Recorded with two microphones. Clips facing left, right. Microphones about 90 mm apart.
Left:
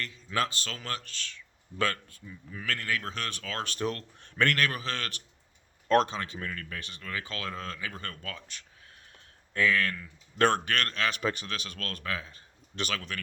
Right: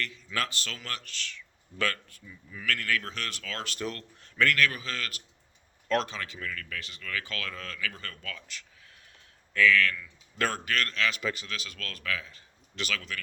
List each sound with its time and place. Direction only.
0.0 s a man's voice: 30° left (ahead or behind)